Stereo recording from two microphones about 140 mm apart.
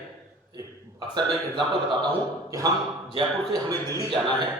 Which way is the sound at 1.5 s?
30° right (ahead or behind).